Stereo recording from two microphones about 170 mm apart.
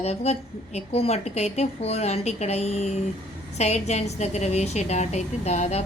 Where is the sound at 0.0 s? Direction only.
40° left (ahead or behind).